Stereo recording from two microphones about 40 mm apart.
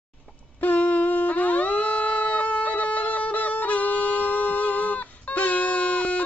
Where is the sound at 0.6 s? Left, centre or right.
Left.